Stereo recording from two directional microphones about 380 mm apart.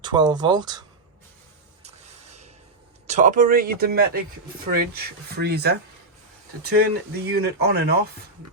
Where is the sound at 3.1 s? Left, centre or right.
Centre.